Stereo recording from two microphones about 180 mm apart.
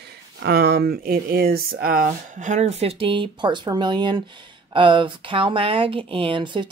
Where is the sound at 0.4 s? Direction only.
60° right (ahead or behind).